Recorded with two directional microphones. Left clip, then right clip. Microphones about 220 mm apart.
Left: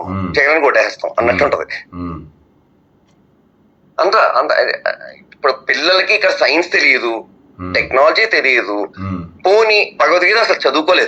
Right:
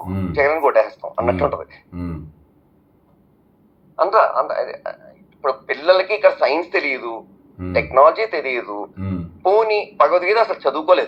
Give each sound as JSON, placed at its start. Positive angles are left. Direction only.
{"t": 0.3, "sound": "speech", "side_deg": 40}
{"t": 1.9, "sound": "speech", "side_deg": -15}
{"t": 3.9, "sound": "a man's voice", "side_deg": 40}